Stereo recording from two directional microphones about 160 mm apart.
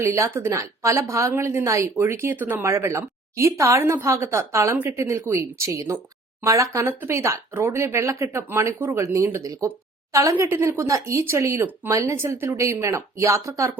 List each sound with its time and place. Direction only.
0.0 s speech: 15° right (ahead or behind)